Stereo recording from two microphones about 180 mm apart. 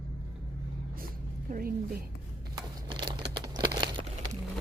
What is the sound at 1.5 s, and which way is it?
Music, 55° right (ahead or behind).